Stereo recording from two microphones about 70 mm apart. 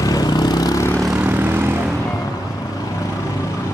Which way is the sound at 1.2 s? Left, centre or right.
Right.